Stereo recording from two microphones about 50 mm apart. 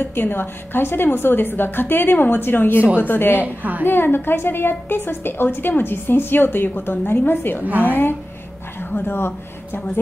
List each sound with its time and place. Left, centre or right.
0.0 s a woman's voice: left
3.4 s a woman's voice: right
3.8 s a woman's voice: left
7.6 s a woman's voice: right
7.9 s a woman's voice: left